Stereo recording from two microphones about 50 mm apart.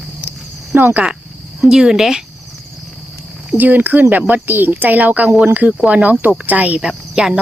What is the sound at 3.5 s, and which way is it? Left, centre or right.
Speech, right.